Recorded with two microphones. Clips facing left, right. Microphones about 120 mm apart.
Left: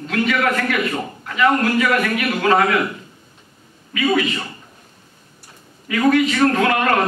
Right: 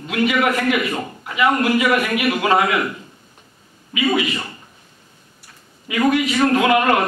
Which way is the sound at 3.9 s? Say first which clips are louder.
Left 1 dB; 15° right (ahead or behind).